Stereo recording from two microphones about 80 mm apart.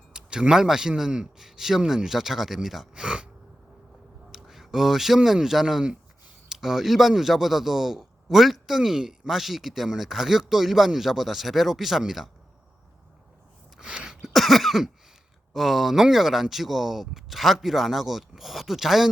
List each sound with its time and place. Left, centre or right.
0.1 s a man's voice: centre
4.3 s speech: centre
13.7 s cough: centre
15.5 s speech: centre